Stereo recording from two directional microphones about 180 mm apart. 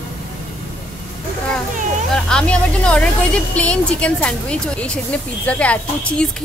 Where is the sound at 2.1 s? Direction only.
5° left (ahead or behind).